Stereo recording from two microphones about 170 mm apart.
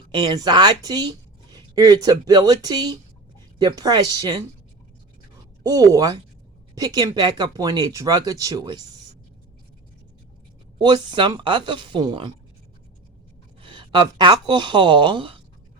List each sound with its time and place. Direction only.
0.1 s speech: 25° right (ahead or behind)
5.6 s speech: 20° right (ahead or behind)
10.8 s speech: 25° right (ahead or behind)
13.6 s speech: 30° right (ahead or behind)